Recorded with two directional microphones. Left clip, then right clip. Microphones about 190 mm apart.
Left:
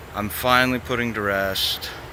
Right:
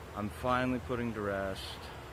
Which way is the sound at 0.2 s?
15° left (ahead or behind).